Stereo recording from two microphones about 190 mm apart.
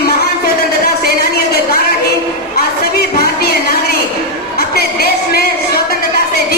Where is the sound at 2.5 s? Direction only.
55° left (ahead or behind).